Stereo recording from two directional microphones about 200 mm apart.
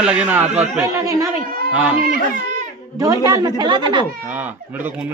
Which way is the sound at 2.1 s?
45° right (ahead or behind).